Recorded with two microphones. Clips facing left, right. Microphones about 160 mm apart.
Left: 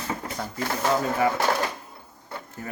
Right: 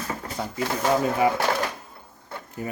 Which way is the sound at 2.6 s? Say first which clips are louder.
Right 6 dB; 15° right (ahead or behind).